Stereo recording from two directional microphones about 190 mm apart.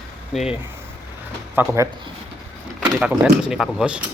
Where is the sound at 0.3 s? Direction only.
Centre (ahead or behind).